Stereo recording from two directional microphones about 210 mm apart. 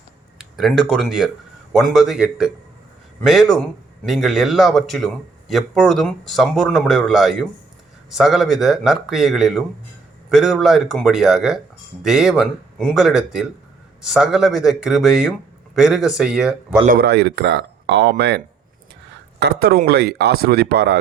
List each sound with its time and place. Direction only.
0.5 s speech: centre (ahead or behind)
16.8 s speech: 45° right (ahead or behind)